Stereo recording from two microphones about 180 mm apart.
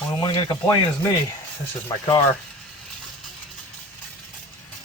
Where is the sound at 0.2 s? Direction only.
25° left (ahead or behind).